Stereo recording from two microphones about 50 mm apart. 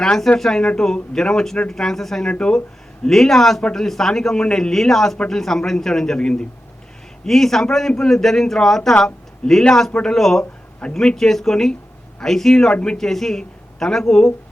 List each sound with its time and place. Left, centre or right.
0.0 s a man's voice: centre
2.3 s speech: left
3.1 s a man's voice: centre
3.6 s speech: centre
3.8 s a man's voice: centre
7.3 s a man's voice: centre
12.7 s speech: centre
13.1 s speech: centre